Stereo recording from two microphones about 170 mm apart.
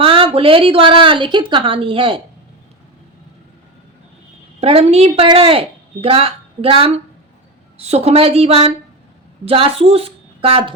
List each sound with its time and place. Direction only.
0.0 s speech: 35° right (ahead or behind)
4.6 s speech: 35° right (ahead or behind)